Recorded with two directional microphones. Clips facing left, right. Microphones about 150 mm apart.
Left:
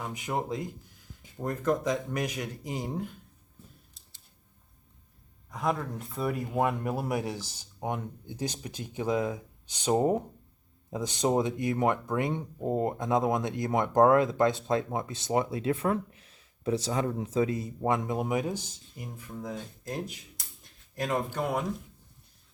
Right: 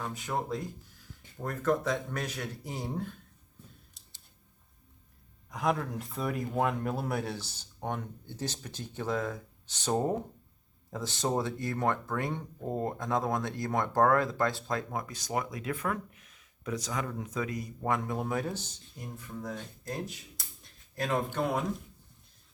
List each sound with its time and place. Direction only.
0.0 s speech: 15° left (ahead or behind)
5.5 s a man's voice: centre (ahead or behind)